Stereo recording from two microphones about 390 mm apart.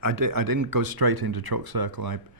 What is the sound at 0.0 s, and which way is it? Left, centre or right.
Speech, right.